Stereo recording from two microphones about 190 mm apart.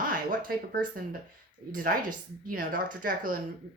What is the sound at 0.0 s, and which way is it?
Speech, 45° right (ahead or behind).